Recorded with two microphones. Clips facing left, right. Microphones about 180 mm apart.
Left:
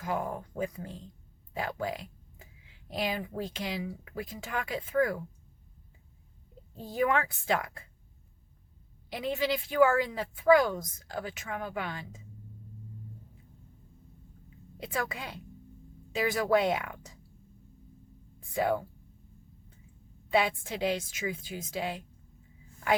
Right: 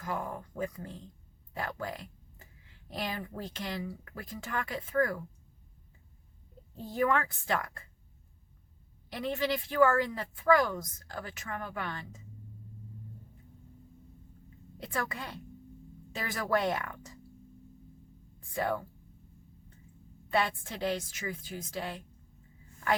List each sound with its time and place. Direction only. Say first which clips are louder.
0.0 s speech: left 3 dB; 20° left (ahead or behind)
1.5 s speech: left 4 dB; 10° left (ahead or behind)
3.0 s speech: left 4 dB; 10° left (ahead or behind)
6.9 s speech: left 1 dB; 15° left (ahead or behind)
9.1 s speech: left 1 dB; 10° left (ahead or behind)
14.8 s speech: left 2 dB; 10° left (ahead or behind)
18.5 s speech: left 4 dB; 10° left (ahead or behind)
20.3 s speech: left 3 dB; 10° left (ahead or behind)